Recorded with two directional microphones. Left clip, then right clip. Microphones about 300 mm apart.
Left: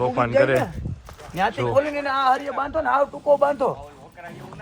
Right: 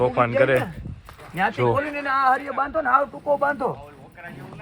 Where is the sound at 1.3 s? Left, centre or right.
Left.